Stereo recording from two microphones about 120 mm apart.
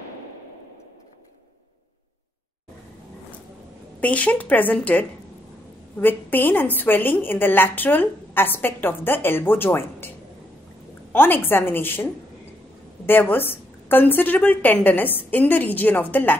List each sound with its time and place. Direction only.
4.0 s a woman's voice: 10° left (ahead or behind)
11.1 s a woman's voice: 15° left (ahead or behind)